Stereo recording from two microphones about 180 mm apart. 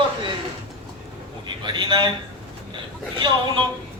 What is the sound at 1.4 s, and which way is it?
Speech, 25° right (ahead or behind).